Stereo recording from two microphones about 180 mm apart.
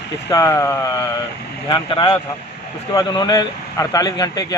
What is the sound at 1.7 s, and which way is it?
Speech, 25° left (ahead or behind).